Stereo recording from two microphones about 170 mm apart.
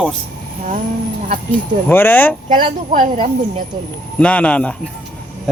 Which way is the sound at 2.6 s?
50° right (ahead or behind).